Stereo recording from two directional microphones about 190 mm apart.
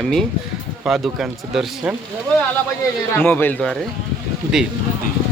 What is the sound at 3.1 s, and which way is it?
Speech, 10° left (ahead or behind).